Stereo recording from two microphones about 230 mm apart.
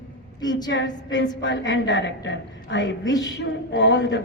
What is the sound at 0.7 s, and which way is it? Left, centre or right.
A woman's voice, left.